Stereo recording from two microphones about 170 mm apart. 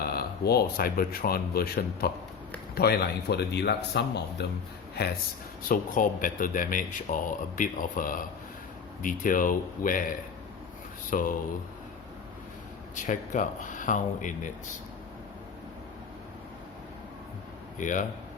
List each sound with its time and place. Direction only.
0.0 s a man's voice: 65° left (ahead or behind); by 4.4 s 80° left
5.0 s a man's voice: 65° left (ahead or behind)
5.6 s speech: 55° left (ahead or behind)
11.1 s speech: 55° left (ahead or behind)
13.0 s speech: 45° left (ahead or behind)
17.7 s a man's voice: 50° left (ahead or behind)